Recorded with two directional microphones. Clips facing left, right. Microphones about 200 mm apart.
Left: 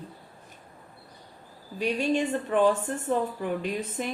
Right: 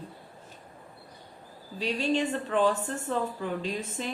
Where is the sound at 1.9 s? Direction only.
10° left (ahead or behind).